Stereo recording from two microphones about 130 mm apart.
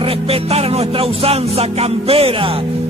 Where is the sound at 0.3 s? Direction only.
50° right (ahead or behind).